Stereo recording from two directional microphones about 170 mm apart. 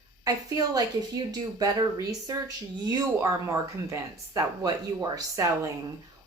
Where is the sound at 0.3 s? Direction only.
20° right (ahead or behind).